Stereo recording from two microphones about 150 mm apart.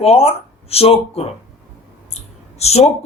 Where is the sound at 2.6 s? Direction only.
45° left (ahead or behind).